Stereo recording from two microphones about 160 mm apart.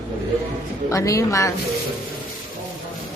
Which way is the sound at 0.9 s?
20° left (ahead or behind).